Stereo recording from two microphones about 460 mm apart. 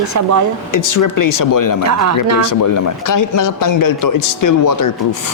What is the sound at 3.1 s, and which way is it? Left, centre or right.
A man's voice, left.